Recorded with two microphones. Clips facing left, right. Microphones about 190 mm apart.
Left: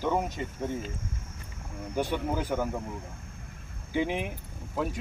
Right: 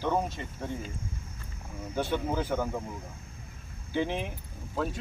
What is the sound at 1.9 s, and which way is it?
Speech, 15° left (ahead or behind).